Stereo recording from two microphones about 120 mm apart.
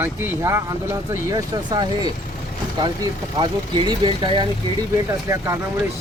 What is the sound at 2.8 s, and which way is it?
Speech, 40° right (ahead or behind).